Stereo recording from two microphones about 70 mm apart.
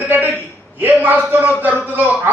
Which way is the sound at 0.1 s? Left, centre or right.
Right.